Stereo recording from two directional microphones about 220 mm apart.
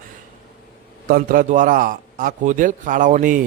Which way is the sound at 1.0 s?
40° right (ahead or behind).